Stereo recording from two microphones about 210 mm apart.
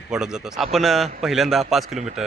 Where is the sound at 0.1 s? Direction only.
5° right (ahead or behind).